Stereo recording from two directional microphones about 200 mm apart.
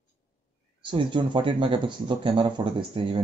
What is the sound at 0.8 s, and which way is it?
Speech, 25° right (ahead or behind).